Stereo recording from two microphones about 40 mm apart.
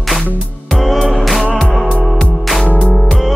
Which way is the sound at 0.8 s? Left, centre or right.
Centre.